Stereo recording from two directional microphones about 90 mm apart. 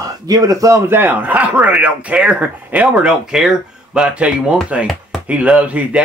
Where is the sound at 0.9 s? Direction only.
20° right (ahead or behind).